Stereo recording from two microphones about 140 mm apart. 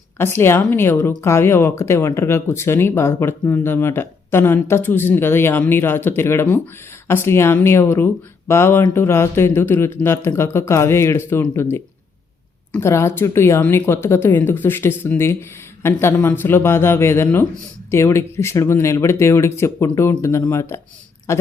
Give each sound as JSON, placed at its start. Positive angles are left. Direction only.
{"t": 0.2, "sound": "speech", "side_deg": 15}